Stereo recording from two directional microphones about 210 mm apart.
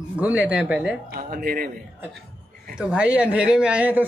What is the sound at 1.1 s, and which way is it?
Speech, 45° right (ahead or behind).